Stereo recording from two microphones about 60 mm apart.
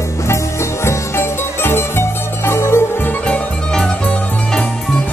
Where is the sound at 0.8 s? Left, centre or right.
Left.